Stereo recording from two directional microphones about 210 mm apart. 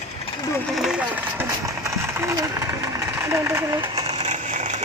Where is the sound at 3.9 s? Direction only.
30° right (ahead or behind).